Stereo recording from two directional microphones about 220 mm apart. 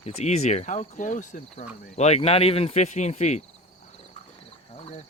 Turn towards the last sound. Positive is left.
turn(degrees=30)  # may be behind; listen again after turning